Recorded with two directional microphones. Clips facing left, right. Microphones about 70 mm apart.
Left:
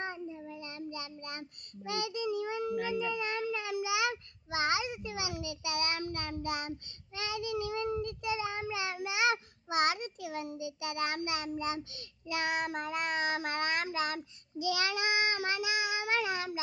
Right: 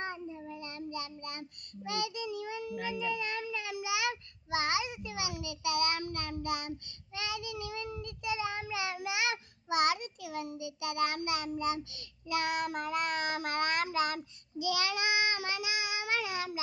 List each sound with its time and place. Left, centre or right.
0.0 s child singing: centre
14.6 s child singing: left